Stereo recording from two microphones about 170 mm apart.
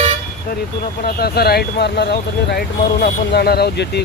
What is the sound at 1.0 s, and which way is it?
Speech, 65° left (ahead or behind).